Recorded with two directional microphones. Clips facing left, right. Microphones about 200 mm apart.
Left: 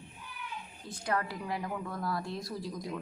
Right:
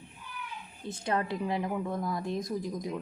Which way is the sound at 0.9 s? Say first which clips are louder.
Right 3 dB; 25° right (ahead or behind).